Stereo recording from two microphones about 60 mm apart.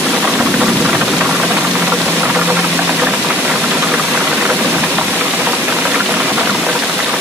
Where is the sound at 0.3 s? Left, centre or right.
Centre.